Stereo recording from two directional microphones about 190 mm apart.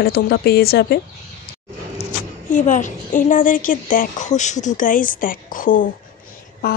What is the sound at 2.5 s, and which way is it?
Speech, 40° left (ahead or behind).